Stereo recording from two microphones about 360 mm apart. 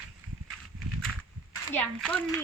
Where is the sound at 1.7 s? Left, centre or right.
Centre.